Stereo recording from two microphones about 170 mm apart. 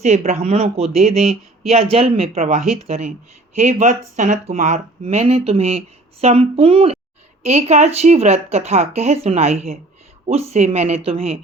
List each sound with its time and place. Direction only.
0.0 s speech: 40° right (ahead or behind)